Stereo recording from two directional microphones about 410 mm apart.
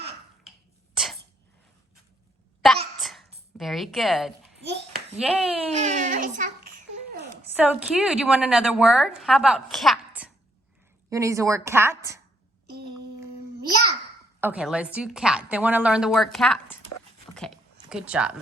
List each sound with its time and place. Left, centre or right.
3.0 s babbling: centre
3.6 s a woman's voice: centre
4.6 s hands: right
5.2 s a woman's voice: centre
5.7 s a child's voice: centre
7.5 s a woman's voice: centre
14.4 s a woman's voice: centre
17.3 s a sound: centre